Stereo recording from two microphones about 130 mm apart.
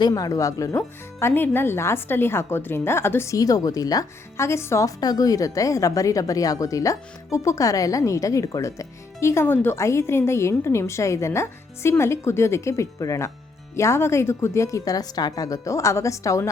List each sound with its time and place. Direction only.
0.0 s speech: 25° left (ahead or behind)
0.8 s speech: 15° left (ahead or behind)